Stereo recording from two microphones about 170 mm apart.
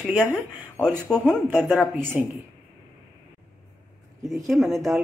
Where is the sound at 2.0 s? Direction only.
15° right (ahead or behind).